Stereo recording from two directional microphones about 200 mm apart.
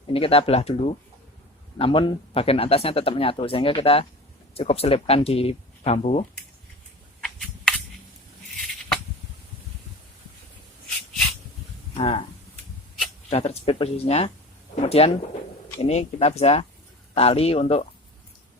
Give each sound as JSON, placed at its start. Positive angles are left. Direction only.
{"t": 0.1, "sound": "speech", "side_deg": 30}
{"t": 7.2, "sound": "cap gun", "side_deg": 5}
{"t": 11.9, "sound": "speech", "side_deg": 30}
{"t": 13.3, "sound": "speech", "side_deg": 30}